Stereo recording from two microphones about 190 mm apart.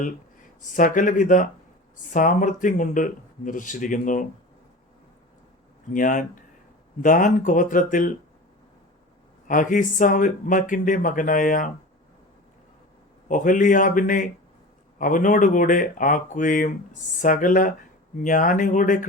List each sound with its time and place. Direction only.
0.7 s speech: 45° left (ahead or behind)
5.9 s speech: 45° left (ahead or behind)
9.5 s speech: 45° left (ahead or behind)
13.2 s speech: 45° left (ahead or behind)